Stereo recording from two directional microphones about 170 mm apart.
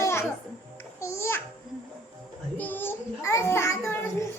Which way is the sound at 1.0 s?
15° left (ahead or behind).